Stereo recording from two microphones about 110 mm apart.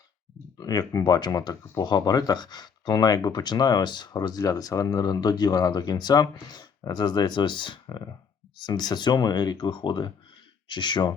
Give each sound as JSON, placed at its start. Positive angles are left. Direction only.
{"t": 0.6, "sound": "speech", "side_deg": 35}